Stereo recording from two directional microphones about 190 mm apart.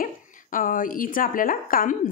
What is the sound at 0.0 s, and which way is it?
Speech, 45° left (ahead or behind).